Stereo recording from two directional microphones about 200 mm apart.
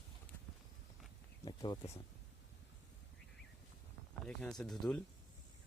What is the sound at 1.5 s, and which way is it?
Speech, 25° left (ahead or behind).